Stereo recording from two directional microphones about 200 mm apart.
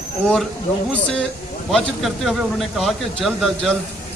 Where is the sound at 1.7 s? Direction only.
Centre (ahead or behind).